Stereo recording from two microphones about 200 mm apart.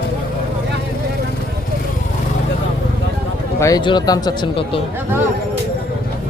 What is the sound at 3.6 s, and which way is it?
Speech, 20° left (ahead or behind).